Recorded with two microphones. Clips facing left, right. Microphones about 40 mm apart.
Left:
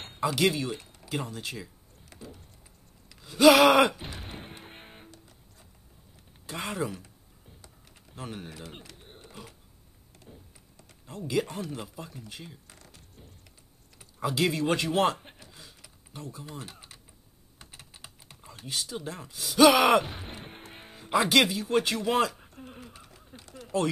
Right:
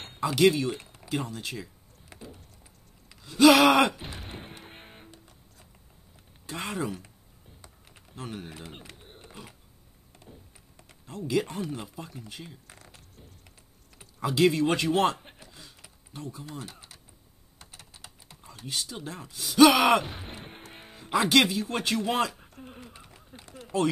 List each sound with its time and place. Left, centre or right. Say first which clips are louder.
0.0 s speech: right 4 dB; centre
2.0 s vehicle: even; centre
3.2 s music: even; centre
6.4 s speech: even; centre
8.1 s speech: right 1 dB; centre
8.5 s speech: even; centre
8.9 s a sound: even; centre
9.2 s a sound: even; centre
10.3 s a man's voice: even; centre
12.6 s music: right 2 dB; right
14.2 s a man's voice: right 4 dB; centre
17.6 s typing: even; centre
19.3 s speech: right 1 dB; centre
23.0 s a sound: right 1 dB; centre